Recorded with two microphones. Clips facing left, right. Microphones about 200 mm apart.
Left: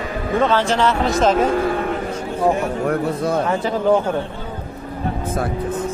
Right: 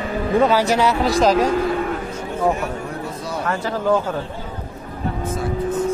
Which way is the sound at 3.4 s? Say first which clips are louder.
Right 1 dB; 15° left (ahead or behind).